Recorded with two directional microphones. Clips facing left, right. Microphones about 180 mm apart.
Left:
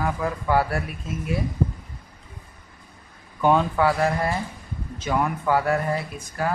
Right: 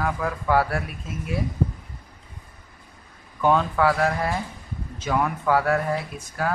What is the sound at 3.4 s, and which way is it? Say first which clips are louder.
Speech: left 1 dB; 5° left (ahead or behind).